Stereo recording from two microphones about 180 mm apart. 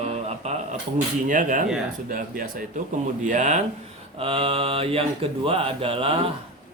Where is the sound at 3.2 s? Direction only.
40° right (ahead or behind).